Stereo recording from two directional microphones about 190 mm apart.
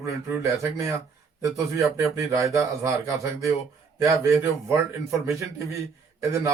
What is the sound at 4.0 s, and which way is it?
Speech, 15° right (ahead or behind).